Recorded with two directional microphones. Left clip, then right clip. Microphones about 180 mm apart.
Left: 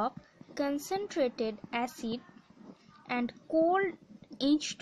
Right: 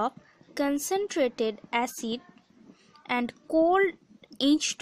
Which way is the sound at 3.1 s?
55° right (ahead or behind).